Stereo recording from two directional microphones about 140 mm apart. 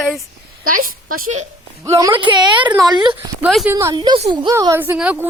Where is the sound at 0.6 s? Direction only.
90° right.